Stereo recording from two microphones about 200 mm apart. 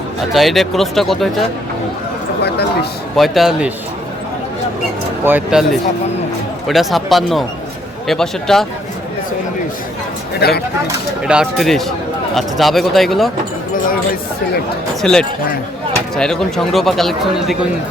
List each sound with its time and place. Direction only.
0.3 s speech: centre (ahead or behind)
3.2 s speech: centre (ahead or behind)
5.2 s speech: 5° right (ahead or behind)
6.7 s speech: centre (ahead or behind)
10.4 s speech: 55° left (ahead or behind)
11.2 s speech: 5° right (ahead or behind)
15.0 s speech: 5° left (ahead or behind)